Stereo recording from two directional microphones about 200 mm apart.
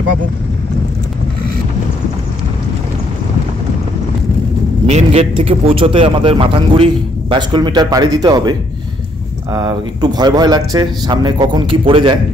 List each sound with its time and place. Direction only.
4.8 s a man's voice: 35° right (ahead or behind)